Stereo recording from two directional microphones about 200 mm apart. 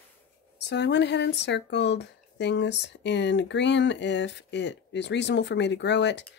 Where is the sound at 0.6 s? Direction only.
60° left (ahead or behind).